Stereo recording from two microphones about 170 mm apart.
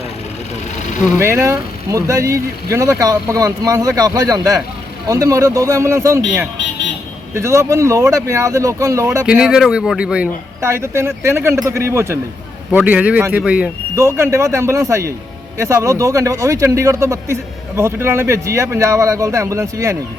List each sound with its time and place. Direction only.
1.2 s speech: 15° right (ahead or behind)
7.3 s speech: 15° right (ahead or behind)
9.2 s speech: 5° right (ahead or behind)